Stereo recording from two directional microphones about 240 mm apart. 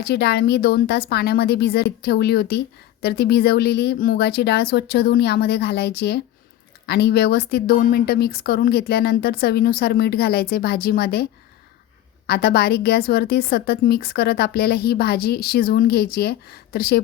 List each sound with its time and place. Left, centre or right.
0.0 s a woman's voice: left